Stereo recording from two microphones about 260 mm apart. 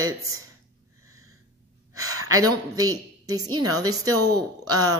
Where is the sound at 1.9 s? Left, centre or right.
Right.